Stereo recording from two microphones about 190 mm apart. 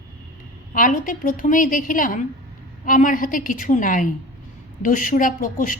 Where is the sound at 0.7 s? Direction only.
45° left (ahead or behind).